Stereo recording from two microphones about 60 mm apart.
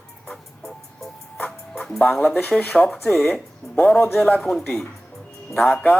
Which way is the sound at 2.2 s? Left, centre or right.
Left.